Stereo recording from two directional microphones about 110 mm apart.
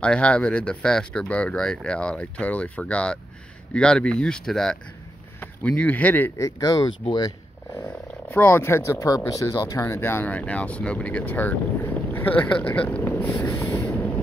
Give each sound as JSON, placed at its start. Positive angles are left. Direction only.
{"t": 0.0, "sound": "speech", "side_deg": 10}
{"t": 7.8, "sound": "speech", "side_deg": 20}
{"t": 13.5, "sound": "vehicle", "side_deg": 25}
{"t": 13.8, "sound": "vehicle", "side_deg": 15}